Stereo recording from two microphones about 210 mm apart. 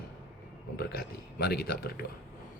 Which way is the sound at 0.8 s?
45° left (ahead or behind).